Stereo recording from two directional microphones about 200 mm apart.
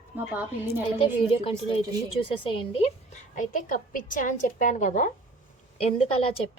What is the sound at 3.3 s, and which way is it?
A woman's voice, 40° left (ahead or behind).